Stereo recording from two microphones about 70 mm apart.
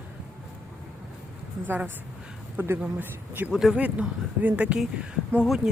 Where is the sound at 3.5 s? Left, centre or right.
Centre.